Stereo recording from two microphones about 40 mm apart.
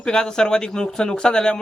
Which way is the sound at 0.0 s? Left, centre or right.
Centre.